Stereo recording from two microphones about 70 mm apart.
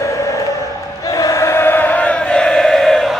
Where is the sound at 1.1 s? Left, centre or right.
Left; by 3.2 s centre.